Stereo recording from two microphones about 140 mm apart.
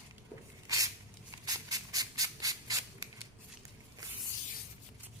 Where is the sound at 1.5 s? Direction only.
25° right (ahead or behind).